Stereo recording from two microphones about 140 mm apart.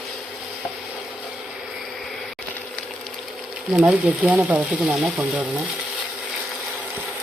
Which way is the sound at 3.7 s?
10° right (ahead or behind).